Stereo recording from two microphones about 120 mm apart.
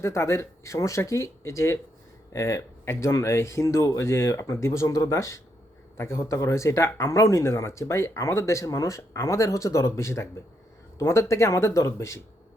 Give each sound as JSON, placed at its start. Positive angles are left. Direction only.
{"t": 0.0, "sound": "speech", "side_deg": 25}